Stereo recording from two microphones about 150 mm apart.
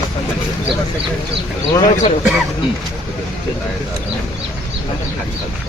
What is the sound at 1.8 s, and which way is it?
Speech, 55° left (ahead or behind).